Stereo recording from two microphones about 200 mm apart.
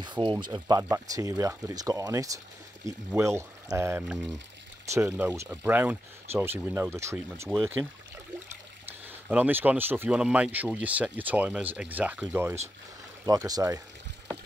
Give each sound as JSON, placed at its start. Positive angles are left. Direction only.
{"t": 0.0, "sound": "speech", "side_deg": -25}
{"t": 9.3, "sound": "speech", "side_deg": -10}